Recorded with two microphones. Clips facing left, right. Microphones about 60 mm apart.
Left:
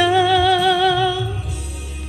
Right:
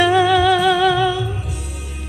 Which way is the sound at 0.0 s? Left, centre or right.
Right.